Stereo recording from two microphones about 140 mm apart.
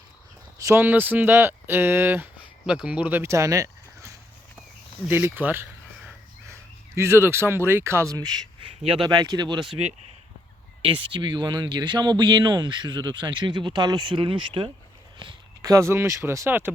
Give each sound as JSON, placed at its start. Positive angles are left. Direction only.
{"t": 0.6, "sound": "speech", "side_deg": -15}
{"t": 8.6, "sound": "a man's voice", "side_deg": -40}
{"t": 9.0, "sound": "speech", "side_deg": -30}
{"t": 10.8, "sound": "speech", "side_deg": -35}
{"t": 15.6, "sound": "speech", "side_deg": -20}